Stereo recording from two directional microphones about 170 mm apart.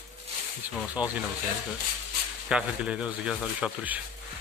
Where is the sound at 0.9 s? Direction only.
10° right (ahead or behind).